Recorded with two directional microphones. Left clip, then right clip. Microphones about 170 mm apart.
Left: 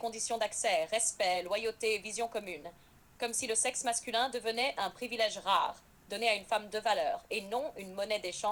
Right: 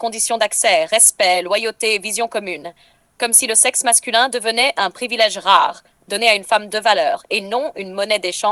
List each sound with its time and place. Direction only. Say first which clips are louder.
0.0 s a woman's voice: right 16 dB; 50° right (ahead or behind)